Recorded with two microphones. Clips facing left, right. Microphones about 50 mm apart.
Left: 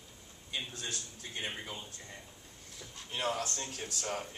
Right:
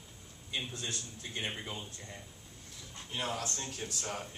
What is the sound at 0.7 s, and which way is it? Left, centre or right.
Speech, right.